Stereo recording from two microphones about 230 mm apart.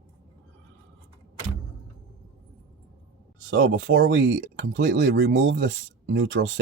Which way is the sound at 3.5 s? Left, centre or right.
Right.